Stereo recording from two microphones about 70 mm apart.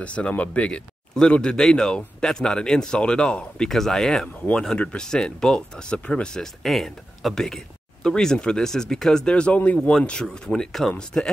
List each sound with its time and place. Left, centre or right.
0.0 s speech: centre